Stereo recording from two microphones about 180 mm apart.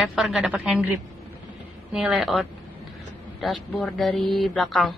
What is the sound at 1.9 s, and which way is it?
A woman's voice, 5° right (ahead or behind).